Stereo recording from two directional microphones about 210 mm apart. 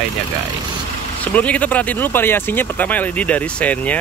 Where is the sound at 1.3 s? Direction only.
5° left (ahead or behind).